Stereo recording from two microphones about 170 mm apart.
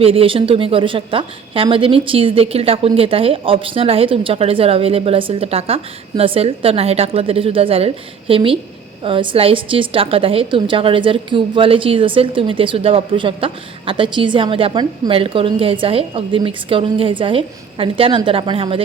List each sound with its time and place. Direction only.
0.0 s a woman's voice: 35° right (ahead or behind)